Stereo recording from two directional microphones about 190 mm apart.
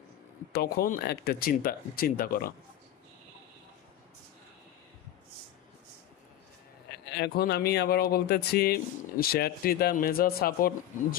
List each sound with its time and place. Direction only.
0.5 s speech: 55° left (ahead or behind)
7.1 s speech: 60° left (ahead or behind)